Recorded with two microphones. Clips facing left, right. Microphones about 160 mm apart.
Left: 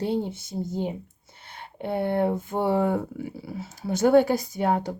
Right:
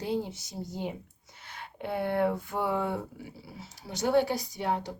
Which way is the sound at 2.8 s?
45° left (ahead or behind).